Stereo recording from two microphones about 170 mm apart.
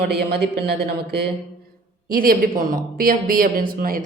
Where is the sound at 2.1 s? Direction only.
60° right (ahead or behind).